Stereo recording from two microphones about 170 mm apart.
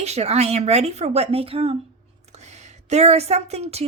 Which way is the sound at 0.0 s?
40° right (ahead or behind).